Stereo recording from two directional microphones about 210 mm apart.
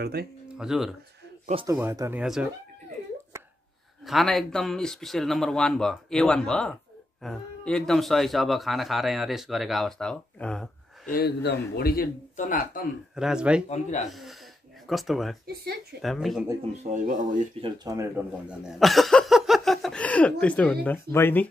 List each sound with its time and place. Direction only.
0.0 s speech: 50° right (ahead or behind)
0.5 s speech: 5° right (ahead or behind)
1.7 s speech: 15° right (ahead or behind)
4.0 s speech: centre (ahead or behind)
11.1 s a man's voice: 50° left (ahead or behind)
13.1 s speech: 5° right (ahead or behind)
13.7 s speech: 35° left (ahead or behind)
14.0 s speech: centre (ahead or behind)
15.4 s speech: 50° right (ahead or behind)
16.0 s speech: centre (ahead or behind)
16.7 s speech: 35° right (ahead or behind)
17.6 s speech: 25° right (ahead or behind)
17.9 s speech: 5° right (ahead or behind); by 21.5 s 10° left (ahead or behind)